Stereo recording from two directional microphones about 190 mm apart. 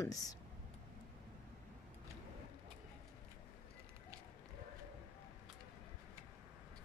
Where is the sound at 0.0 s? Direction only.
20° left (ahead or behind).